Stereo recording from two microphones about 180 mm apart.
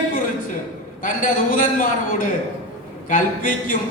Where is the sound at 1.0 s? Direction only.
45° left (ahead or behind).